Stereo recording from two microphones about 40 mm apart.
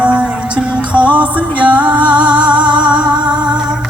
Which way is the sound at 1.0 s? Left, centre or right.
Right.